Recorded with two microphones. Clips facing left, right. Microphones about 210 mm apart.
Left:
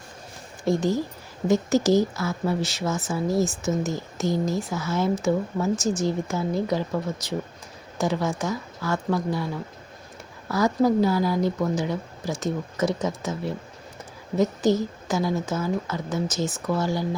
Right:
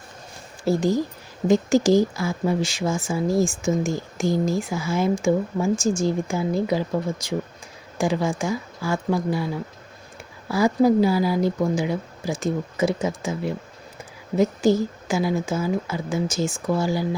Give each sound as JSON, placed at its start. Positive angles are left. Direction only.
{"t": 0.6, "sound": "speech", "side_deg": -10}
{"t": 5.7, "sound": "speech", "side_deg": -25}
{"t": 6.0, "sound": "speech", "side_deg": -10}
{"t": 10.5, "sound": "speech", "side_deg": -10}